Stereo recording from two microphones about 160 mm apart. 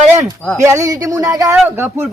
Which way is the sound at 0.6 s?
20° right (ahead or behind).